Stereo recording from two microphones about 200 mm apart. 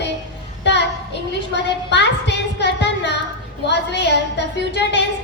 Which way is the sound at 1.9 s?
60° left (ahead or behind).